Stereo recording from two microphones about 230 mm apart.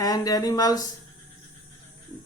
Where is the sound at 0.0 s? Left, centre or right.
Centre.